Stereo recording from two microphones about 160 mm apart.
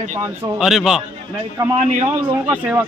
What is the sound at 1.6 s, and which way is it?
Speech, 20° right (ahead or behind).